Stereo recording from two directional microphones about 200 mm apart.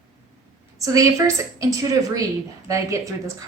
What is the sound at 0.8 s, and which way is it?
A woman's voice, 15° right (ahead or behind).